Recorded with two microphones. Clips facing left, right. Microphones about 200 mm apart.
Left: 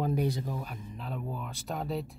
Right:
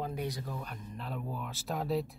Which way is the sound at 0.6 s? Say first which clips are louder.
Left 2 dB; centre (ahead or behind).